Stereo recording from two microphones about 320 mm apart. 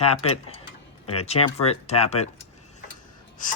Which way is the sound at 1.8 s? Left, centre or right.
Centre.